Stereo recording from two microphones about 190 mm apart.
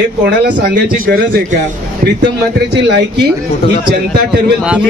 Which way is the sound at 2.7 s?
65° right (ahead or behind).